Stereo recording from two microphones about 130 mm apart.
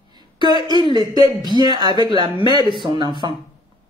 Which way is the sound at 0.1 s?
35° right (ahead or behind).